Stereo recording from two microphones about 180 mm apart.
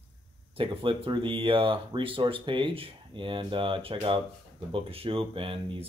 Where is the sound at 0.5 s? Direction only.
30° right (ahead or behind).